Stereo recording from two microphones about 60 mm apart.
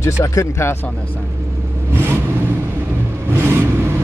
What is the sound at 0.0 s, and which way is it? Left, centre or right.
Speech, left.